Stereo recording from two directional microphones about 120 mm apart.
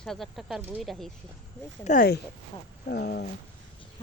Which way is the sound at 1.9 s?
80° left.